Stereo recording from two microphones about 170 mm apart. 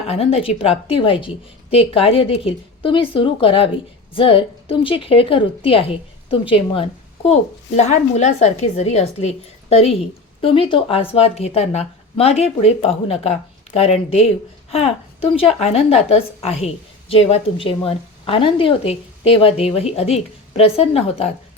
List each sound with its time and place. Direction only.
0.1 s a woman's voice: 35° left (ahead or behind)